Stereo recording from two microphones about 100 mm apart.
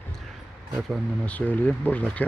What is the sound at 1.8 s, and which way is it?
Speech, 15° left (ahead or behind).